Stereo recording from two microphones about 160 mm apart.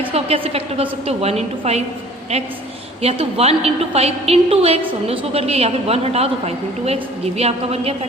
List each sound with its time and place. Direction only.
0.0 s a woman's voice: 35° right (ahead or behind)
3.0 s a woman's voice: 40° right (ahead or behind)